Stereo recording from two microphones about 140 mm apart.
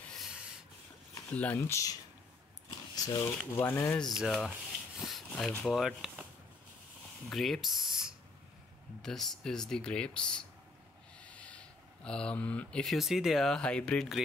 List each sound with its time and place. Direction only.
0.2 s a sound: 5° right (ahead or behind)
1.3 s speech: 10° left (ahead or behind)
3.0 s speech: 20° left (ahead or behind)
4.0 s speech: centre (ahead or behind)
7.2 s speech: centre (ahead or behind)